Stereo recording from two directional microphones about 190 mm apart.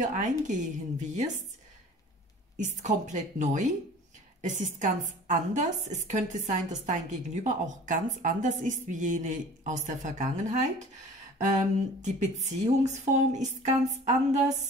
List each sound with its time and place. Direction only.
0.0 s a woman's voice: 40° right (ahead or behind)
2.5 s a woman's voice: 40° right (ahead or behind)